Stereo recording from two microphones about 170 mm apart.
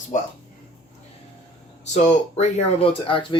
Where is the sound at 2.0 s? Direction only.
40° left (ahead or behind).